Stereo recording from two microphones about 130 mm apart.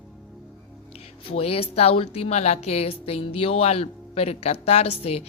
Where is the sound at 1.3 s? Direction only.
50° left (ahead or behind).